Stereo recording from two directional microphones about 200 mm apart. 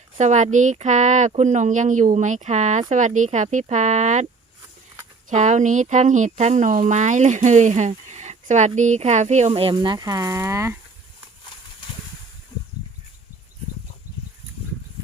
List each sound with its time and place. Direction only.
0.2 s speech: 35° right (ahead or behind)
5.3 s speech: 35° right (ahead or behind); by 10.8 s 15° right (ahead or behind)